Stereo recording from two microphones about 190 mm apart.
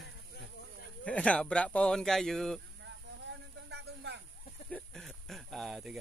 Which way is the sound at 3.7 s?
65° right (ahead or behind).